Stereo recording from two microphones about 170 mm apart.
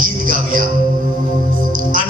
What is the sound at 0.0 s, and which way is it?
Music, 55° right (ahead or behind).